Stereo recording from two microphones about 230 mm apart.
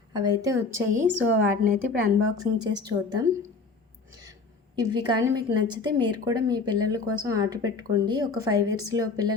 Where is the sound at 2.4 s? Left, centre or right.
Centre.